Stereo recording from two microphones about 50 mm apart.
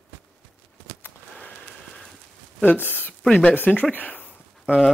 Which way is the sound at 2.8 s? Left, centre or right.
Left.